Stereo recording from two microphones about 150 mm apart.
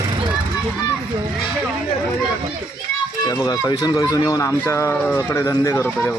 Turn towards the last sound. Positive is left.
turn(degrees=15)  # may be behind; listen again after turning